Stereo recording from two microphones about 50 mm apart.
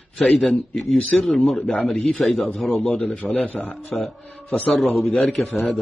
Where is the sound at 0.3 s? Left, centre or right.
Centre.